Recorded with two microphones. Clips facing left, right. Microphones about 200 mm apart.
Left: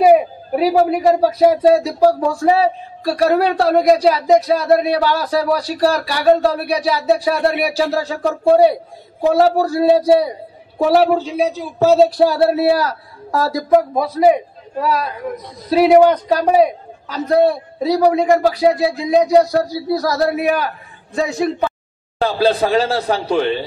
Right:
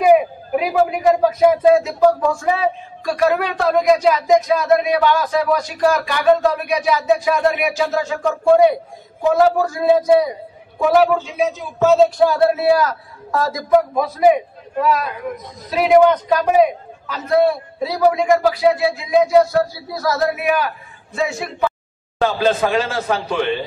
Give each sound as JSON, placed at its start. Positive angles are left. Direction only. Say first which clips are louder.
{"t": 0.0, "sound": "speech", "louder": "left 2 dB", "side_deg": 35}